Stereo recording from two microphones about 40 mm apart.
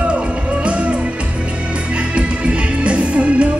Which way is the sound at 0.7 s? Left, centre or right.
Right.